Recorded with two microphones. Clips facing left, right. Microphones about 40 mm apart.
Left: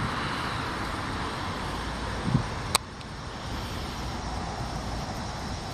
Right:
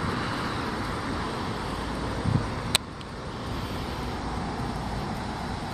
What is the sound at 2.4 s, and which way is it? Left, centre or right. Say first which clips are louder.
Vehicle: right 1 dB; centre.